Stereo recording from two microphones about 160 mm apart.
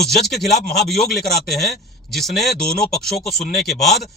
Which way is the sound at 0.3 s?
80° left.